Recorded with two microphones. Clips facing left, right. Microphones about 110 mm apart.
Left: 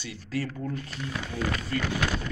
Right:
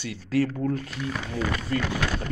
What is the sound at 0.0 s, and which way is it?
Speech, 70° right (ahead or behind).